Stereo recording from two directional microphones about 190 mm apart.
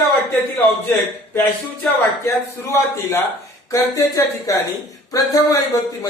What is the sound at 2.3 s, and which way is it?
Speech, 15° left (ahead or behind).